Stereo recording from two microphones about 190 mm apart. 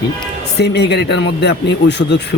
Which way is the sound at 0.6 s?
60° left (ahead or behind).